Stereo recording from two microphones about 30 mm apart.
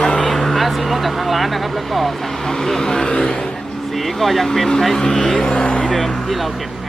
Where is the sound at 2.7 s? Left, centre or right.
Left.